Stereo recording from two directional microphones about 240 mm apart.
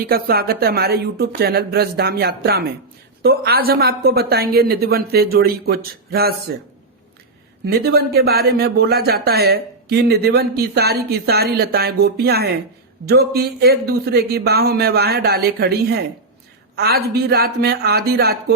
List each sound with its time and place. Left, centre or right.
0.0 s speech: right
7.6 s speech: right